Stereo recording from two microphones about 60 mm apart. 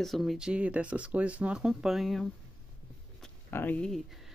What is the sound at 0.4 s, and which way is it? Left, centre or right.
Speech, right.